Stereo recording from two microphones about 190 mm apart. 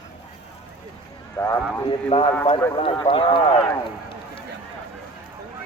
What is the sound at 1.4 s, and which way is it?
Horse, 15° left (ahead or behind).